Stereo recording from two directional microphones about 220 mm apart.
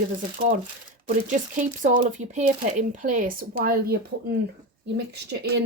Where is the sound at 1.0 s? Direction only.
35° right (ahead or behind).